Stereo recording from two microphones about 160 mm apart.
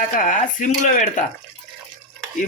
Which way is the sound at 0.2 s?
55° left (ahead or behind).